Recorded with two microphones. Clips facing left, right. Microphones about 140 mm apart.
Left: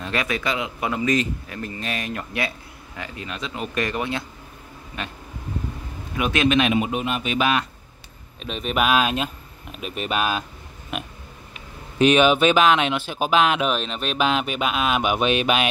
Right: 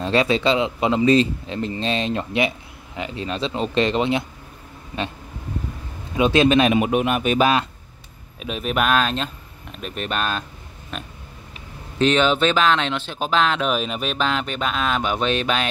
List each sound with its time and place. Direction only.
0.0 s a man's voice: 30° right (ahead or behind)
6.1 s a man's voice: 30° right (ahead or behind)
6.7 s speech: 60° right (ahead or behind)
7.3 s a man's voice: 35° right (ahead or behind)
8.4 s speech: 5° right (ahead or behind); by 13.7 s 10° left (ahead or behind)
13.7 s speech: 5° right (ahead or behind)
14.1 s speech: 10° left (ahead or behind)